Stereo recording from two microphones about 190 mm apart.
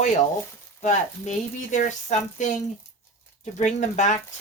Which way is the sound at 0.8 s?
40° left (ahead or behind).